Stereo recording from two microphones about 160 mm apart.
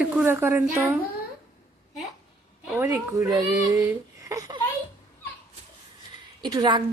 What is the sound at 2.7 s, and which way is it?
A woman's voice, 15° right (ahead or behind).